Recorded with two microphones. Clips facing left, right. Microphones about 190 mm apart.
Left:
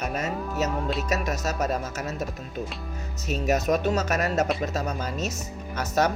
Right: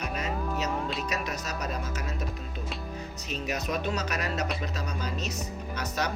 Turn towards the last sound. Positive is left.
turn(degrees=45)  # may be behind; listen again after turning